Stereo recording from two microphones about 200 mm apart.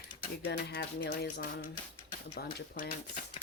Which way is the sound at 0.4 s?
55° left (ahead or behind).